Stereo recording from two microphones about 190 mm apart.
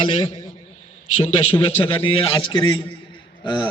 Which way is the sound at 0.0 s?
25° left (ahead or behind).